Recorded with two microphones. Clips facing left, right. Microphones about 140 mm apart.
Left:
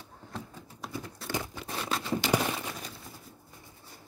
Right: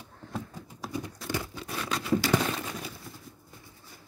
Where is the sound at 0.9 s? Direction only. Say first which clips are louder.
Right 4 dB; 15° right (ahead or behind).